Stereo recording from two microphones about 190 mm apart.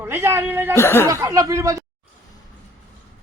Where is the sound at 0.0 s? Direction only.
10° right (ahead or behind).